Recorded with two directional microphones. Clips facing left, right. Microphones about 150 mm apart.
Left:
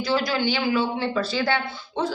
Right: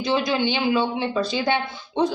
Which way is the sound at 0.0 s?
20° right (ahead or behind).